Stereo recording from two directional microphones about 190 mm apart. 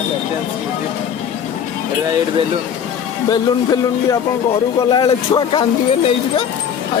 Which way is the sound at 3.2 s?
20° left (ahead or behind).